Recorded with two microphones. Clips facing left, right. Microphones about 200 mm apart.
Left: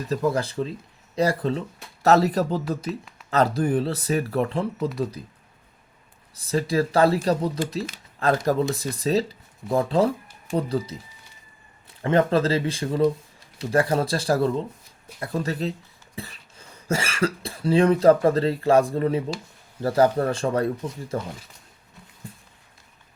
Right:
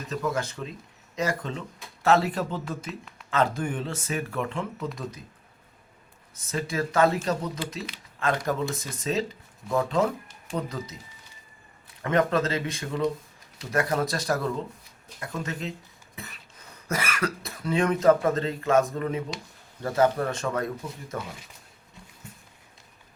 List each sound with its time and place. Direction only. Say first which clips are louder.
0.1 s speech: left 5 dB; 35° left (ahead or behind)
6.3 s speech: left 7 dB; 35° left (ahead or behind)
12.0 s speech: left 4 dB; 30° left (ahead or behind)
22.3 s a sound: left 6 dB; 35° left (ahead or behind)